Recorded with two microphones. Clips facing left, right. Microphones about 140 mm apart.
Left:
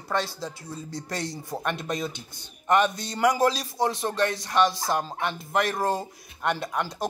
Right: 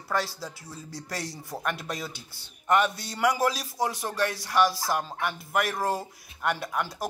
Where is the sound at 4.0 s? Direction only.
20° left (ahead or behind).